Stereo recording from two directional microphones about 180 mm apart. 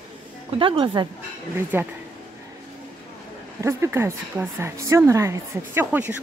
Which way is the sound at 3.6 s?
15° right (ahead or behind).